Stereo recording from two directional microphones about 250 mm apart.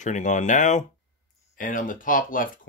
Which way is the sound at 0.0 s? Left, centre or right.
Left.